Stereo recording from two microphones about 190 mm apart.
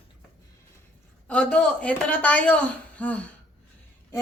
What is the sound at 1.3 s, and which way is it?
Speech, 5° left (ahead or behind).